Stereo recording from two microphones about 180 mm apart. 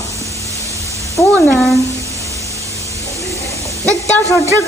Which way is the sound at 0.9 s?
15° left (ahead or behind).